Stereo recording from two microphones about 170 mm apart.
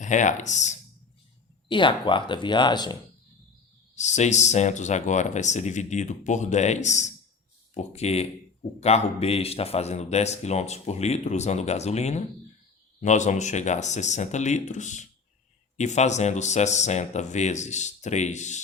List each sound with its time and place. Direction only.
0.0 s speech: 45° left (ahead or behind)
1.6 s speech: 30° left (ahead or behind)
3.9 s speech: 45° left (ahead or behind)